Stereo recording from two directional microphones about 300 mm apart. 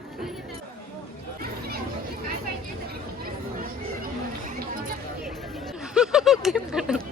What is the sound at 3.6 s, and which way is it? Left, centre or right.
Chatter, right.